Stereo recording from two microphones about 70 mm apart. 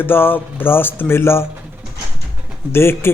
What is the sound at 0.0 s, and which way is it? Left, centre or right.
Speech, left.